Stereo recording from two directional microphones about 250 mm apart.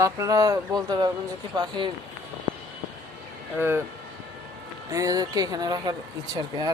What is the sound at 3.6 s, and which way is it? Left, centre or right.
Speech, centre.